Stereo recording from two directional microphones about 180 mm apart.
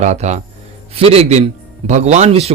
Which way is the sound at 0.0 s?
40° right (ahead or behind).